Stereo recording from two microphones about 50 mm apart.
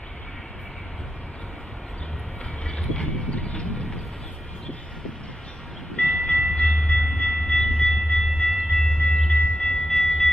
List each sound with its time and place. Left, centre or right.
2.6 s vehicle: centre
5.9 s train: left